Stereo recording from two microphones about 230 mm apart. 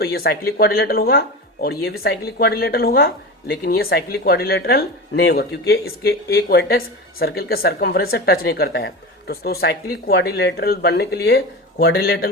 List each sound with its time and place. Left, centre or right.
0.0 s speech: left